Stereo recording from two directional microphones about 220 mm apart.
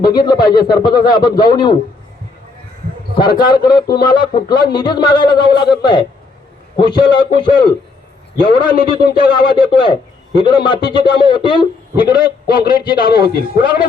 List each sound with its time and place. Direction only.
0.0 s a man's voice: 20° left (ahead or behind)
3.2 s a man's voice: 20° left (ahead or behind)